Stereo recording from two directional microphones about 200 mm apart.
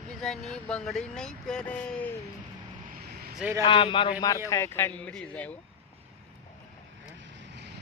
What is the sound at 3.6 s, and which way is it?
Speech, 25° left (ahead or behind).